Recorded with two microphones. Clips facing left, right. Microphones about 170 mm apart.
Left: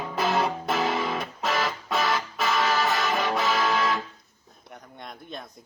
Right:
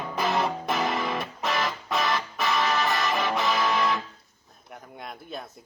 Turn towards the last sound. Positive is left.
turn(degrees=-5)  # may be behind; listen again after turning